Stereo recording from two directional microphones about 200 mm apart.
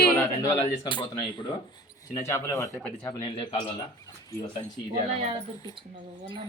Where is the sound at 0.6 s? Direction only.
25° left (ahead or behind).